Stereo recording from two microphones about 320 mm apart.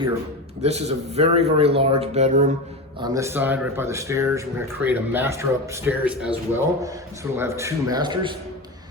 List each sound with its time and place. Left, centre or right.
0.6 s a man's voice: centre
3.0 s speech: centre